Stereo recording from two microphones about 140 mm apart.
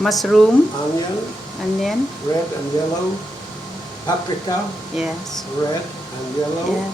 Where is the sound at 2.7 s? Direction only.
30° left (ahead or behind).